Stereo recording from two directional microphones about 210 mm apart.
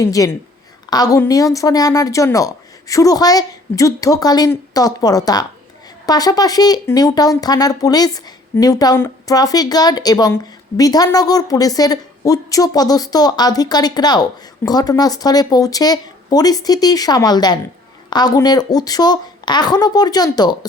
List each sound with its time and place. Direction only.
0.0 s speech: 15° left (ahead or behind)